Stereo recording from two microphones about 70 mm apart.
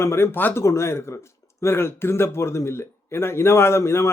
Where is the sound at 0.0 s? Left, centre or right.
Left.